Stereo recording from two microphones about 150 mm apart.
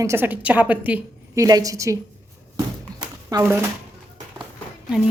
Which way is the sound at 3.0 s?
25° right (ahead or behind).